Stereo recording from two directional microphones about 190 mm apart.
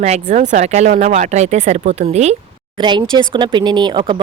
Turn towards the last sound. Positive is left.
turn(degrees=-25)  # may be behind; listen again after turning